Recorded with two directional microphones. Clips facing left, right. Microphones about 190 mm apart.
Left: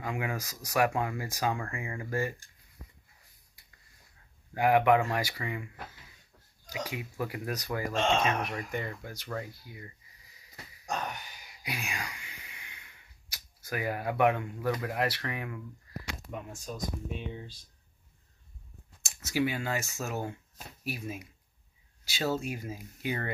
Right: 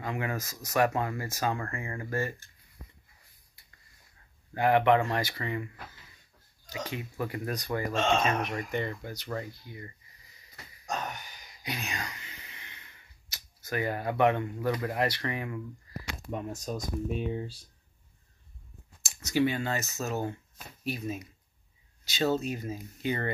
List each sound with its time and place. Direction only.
0.0 s speech: 10° left (ahead or behind)
4.6 s speech: 10° left (ahead or behind)
6.7 s speech: 10° left (ahead or behind)
11.6 s a sound: 10° left (ahead or behind)
14.9 s speech: 5° left (ahead or behind)
16.3 s speech: 40° right (ahead or behind)
19.0 s speech: 5° left (ahead or behind)